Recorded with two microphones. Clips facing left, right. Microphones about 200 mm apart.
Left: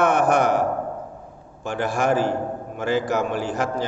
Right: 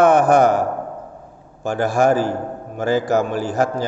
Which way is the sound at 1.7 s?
40° right (ahead or behind).